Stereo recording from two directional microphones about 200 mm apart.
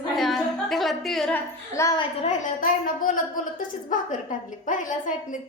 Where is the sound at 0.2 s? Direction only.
Centre (ahead or behind).